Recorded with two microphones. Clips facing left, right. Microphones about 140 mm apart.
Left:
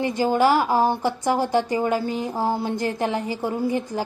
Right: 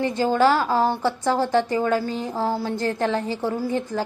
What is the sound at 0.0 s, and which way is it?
A woman's voice, 15° left (ahead or behind).